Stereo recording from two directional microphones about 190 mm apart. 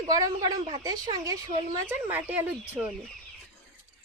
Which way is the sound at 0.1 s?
20° right (ahead or behind).